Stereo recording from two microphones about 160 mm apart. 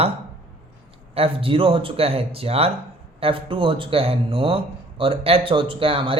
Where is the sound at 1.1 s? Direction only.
35° right (ahead or behind).